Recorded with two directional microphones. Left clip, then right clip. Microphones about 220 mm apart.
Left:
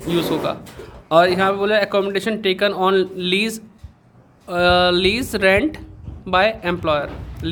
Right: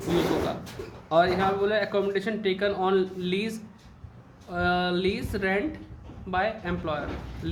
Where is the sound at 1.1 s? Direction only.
40° left (ahead or behind).